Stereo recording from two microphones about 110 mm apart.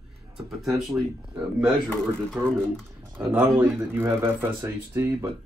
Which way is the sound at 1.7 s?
5° left (ahead or behind).